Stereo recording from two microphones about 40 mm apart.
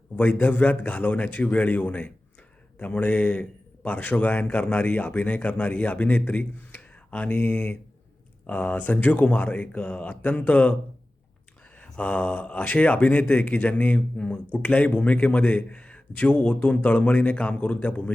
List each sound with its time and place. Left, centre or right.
0.2 s speech: left
11.8 s a man's voice: left